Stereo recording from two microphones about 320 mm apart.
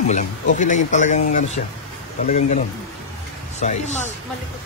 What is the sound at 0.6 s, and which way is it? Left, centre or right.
Speech, left.